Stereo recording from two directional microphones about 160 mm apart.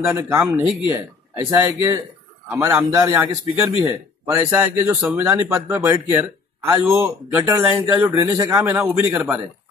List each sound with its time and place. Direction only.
0.0 s a man's voice: 15° right (ahead or behind)